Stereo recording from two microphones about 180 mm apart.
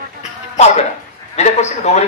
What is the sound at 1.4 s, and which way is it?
Speech, 40° left (ahead or behind).